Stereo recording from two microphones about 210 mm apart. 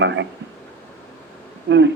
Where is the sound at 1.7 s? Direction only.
55° right (ahead or behind).